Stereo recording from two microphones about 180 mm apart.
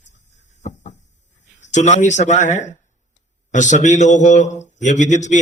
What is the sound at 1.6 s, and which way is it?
A man's voice, 40° left (ahead or behind).